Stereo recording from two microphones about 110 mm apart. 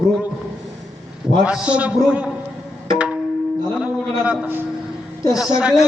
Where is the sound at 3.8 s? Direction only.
10° right (ahead or behind).